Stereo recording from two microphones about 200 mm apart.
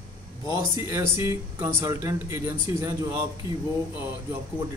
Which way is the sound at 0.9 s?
10° right (ahead or behind).